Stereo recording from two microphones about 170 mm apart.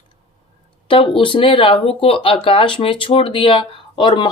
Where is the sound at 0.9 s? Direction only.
30° left (ahead or behind).